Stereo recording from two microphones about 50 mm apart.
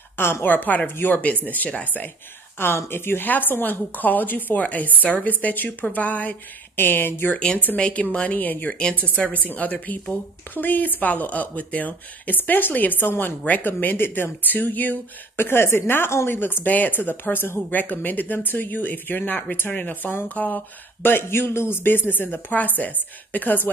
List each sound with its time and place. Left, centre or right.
0.2 s speech: left
0.5 s speech: left
2.6 s speech: left
3.3 s speech: left
6.8 s speech: left
7.7 s a woman's voice: left
15.3 s speech: left